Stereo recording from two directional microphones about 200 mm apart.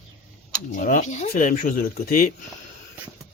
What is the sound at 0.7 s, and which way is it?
Speech, 40° left (ahead or behind).